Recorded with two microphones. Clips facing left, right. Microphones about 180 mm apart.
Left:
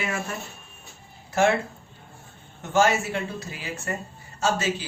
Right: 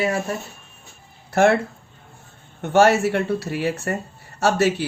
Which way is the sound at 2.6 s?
65° right (ahead or behind).